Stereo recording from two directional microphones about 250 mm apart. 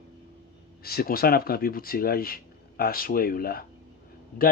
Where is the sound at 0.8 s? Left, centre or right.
Left.